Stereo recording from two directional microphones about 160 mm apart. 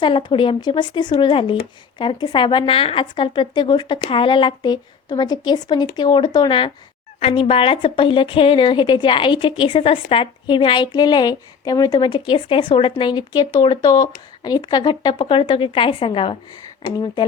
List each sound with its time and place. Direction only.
0.0 s a woman's voice: 30° left (ahead or behind)